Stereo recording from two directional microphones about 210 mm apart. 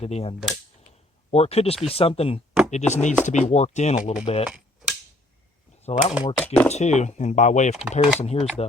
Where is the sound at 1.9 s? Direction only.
30° left (ahead or behind).